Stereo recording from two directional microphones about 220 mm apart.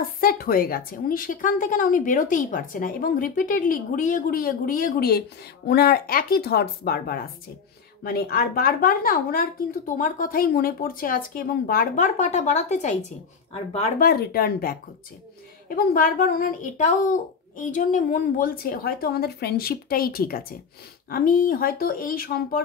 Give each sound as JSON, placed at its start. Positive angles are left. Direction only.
{"t": 0.2, "sound": "a woman's voice", "side_deg": 40}
{"t": 13.9, "sound": "a woman's voice", "side_deg": 45}